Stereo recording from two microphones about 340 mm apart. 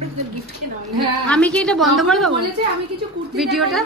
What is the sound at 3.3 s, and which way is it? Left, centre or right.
Speech, centre.